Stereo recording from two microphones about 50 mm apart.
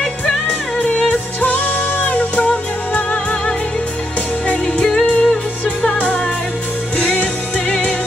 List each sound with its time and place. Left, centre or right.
0.7 s music: left
4.5 s music: centre
7.0 s music: left